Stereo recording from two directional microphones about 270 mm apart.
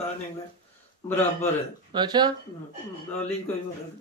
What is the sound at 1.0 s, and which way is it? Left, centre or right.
Speech, centre.